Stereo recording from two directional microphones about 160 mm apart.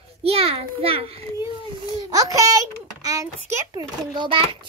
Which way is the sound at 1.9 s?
25° right (ahead or behind).